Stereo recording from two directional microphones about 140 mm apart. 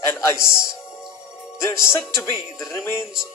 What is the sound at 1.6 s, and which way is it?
Speech, 20° left (ahead or behind).